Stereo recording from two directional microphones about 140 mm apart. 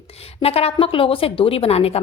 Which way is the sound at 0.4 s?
45° left (ahead or behind).